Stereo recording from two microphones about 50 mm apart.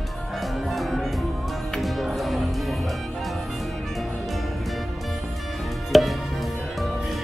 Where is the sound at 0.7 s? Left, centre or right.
Centre.